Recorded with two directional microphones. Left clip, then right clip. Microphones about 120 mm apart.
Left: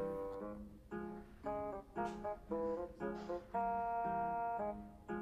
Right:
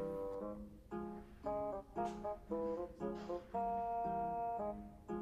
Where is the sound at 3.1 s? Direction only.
90° right.